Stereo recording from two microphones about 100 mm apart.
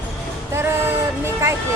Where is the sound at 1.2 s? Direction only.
30° right (ahead or behind).